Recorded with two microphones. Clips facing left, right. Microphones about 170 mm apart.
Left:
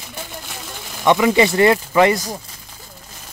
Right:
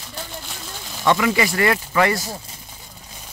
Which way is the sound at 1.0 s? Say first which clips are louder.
Left 4 dB; 20° left (ahead or behind).